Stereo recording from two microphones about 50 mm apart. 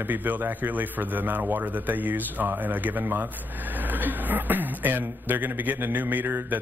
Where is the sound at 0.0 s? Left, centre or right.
Right.